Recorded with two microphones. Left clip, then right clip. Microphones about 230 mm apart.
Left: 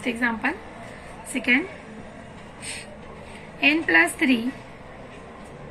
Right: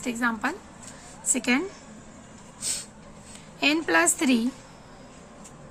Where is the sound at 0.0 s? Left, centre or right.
Right.